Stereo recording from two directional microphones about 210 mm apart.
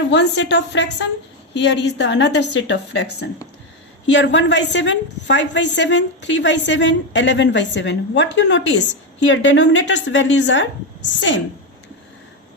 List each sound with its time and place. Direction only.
0.1 s a woman's voice: 55° left (ahead or behind)